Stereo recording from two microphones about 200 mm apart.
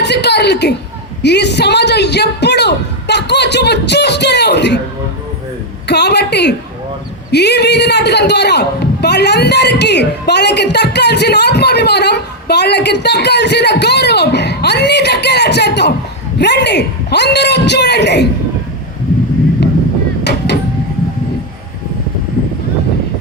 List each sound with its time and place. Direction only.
0.0 s a man's voice: 60° left (ahead or behind)
5.9 s a man's voice: 55° left (ahead or behind)